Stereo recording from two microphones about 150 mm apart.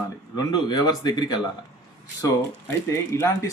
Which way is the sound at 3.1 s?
20° left (ahead or behind).